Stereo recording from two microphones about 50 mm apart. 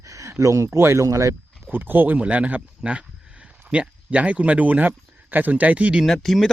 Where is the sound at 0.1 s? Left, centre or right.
Right.